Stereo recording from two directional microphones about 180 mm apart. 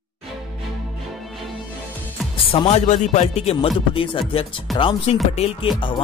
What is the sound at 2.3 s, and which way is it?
A man's voice, 30° left (ahead or behind).